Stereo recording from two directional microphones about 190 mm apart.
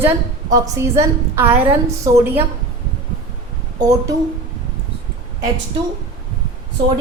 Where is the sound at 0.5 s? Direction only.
15° right (ahead or behind).